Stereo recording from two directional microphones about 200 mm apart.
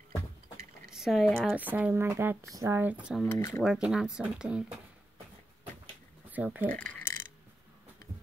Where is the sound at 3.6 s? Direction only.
5° right (ahead or behind).